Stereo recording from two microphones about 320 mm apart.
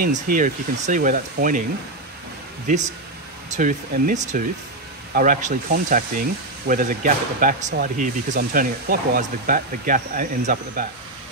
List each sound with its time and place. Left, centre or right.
0.0 s speech: right
2.6 s speech: right